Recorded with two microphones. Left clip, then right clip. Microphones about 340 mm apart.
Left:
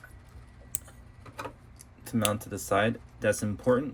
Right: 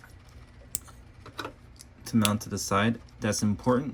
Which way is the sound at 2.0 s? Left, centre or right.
Centre.